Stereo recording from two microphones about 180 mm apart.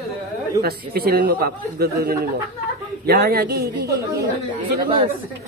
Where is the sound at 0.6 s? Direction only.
60° right (ahead or behind).